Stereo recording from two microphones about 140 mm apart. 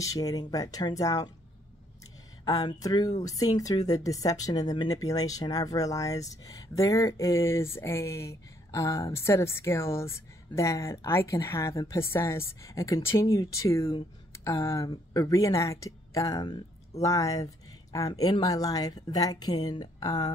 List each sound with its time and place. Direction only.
0.0 s speech: 25° left (ahead or behind)
2.4 s speech: 25° left (ahead or behind)